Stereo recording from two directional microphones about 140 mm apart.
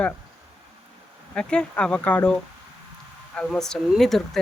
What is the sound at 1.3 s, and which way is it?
Speech, 5° left (ahead or behind).